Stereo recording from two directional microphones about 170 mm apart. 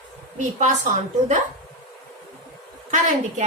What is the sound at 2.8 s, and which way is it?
Speech, 45° right (ahead or behind).